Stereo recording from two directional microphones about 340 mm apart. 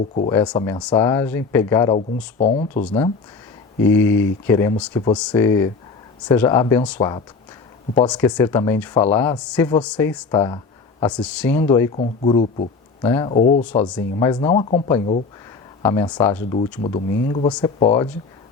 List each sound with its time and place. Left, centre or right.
0.3 s speech: centre
3.8 s speech: centre